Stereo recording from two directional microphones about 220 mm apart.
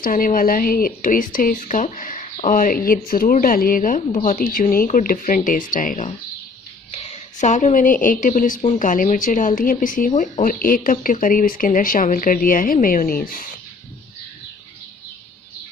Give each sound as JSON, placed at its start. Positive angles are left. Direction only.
{"t": 0.0, "sound": "a woman's voice", "side_deg": 40}